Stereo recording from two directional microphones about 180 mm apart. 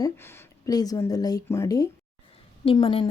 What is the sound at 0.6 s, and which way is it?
Speech, 20° left (ahead or behind).